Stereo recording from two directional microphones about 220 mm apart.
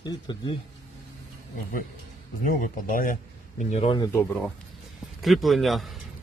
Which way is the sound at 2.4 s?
35° left (ahead or behind).